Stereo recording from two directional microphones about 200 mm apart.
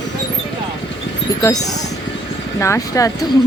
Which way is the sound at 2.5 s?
15° left (ahead or behind).